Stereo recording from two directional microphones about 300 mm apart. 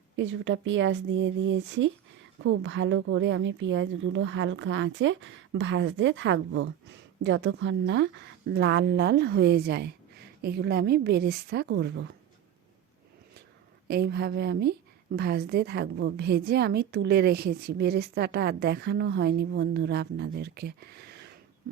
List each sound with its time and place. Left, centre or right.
0.2 s speech: right
13.8 s speech: right